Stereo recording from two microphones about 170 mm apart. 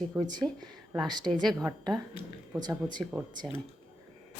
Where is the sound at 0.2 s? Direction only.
25° right (ahead or behind).